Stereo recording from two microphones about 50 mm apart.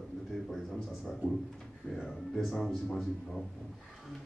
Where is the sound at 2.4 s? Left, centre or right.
Centre.